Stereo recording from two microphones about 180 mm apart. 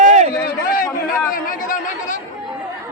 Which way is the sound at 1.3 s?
50° left (ahead or behind).